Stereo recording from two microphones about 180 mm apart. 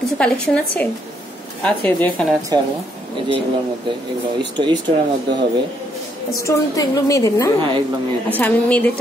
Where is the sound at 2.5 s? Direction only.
20° right (ahead or behind).